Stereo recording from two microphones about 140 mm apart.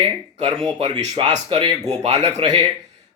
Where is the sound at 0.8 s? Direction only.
55° right (ahead or behind).